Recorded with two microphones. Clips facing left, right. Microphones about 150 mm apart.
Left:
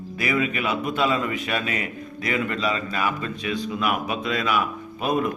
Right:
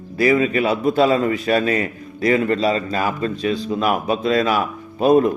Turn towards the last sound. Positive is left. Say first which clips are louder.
# right 9 dB
turn(degrees=-35)  # may be behind; listen again after turning